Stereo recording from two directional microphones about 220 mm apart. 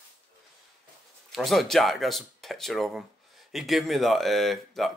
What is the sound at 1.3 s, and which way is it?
Speech, centre (ahead or behind).